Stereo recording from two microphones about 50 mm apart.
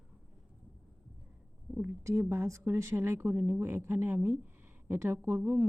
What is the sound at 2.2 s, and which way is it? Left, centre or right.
Speech, right.